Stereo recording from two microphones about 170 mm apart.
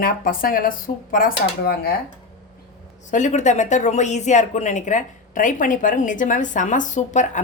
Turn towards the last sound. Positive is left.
turn(degrees=45)  # may be behind; listen again after turning